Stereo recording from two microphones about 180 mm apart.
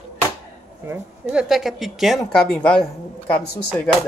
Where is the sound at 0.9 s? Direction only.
5° right (ahead or behind).